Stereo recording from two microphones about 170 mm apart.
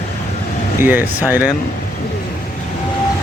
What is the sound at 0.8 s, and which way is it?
Speech, 10° right (ahead or behind).